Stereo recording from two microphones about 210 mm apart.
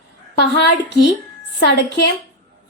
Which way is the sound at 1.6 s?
55° left (ahead or behind).